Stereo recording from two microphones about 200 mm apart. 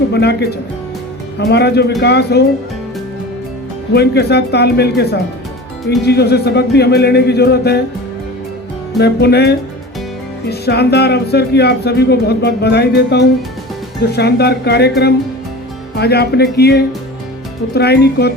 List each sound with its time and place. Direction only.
0.1 s speech: 55° left (ahead or behind)
1.5 s speech: 55° left (ahead or behind)
3.9 s speech: 55° left (ahead or behind)
9.0 s speech: 55° left (ahead or behind)